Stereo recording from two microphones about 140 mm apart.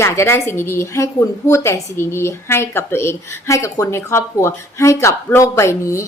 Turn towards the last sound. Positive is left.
turn(degrees=20)  # may be behind; listen again after turning